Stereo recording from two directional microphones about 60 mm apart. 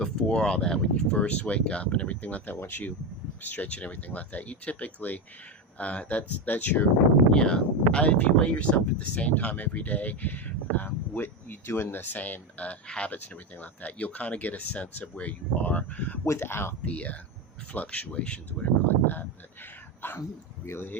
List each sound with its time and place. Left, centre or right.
0.0 s speech: centre; by 6.8 s left
7.3 s speech: centre
16.2 s speech: left
16.8 s speech: left
18.9 s speech: left